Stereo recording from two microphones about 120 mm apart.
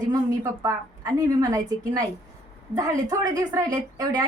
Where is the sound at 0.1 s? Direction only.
30° right (ahead or behind).